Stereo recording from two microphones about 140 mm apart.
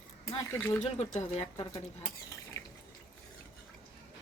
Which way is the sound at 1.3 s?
45° left (ahead or behind).